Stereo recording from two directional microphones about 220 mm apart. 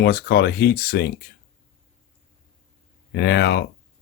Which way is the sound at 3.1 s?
45° left (ahead or behind).